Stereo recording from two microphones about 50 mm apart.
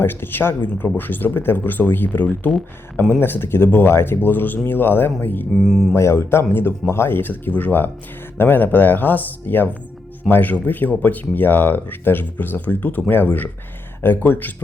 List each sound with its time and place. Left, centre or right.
0.0 s speech: left
5.6 s speech: centre
5.9 s speech: left
7.2 s speech: left